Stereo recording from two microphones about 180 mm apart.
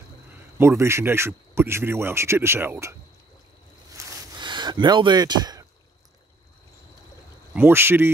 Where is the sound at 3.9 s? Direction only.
15° right (ahead or behind).